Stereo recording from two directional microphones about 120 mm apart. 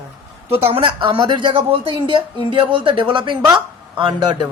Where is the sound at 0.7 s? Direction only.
45° right (ahead or behind).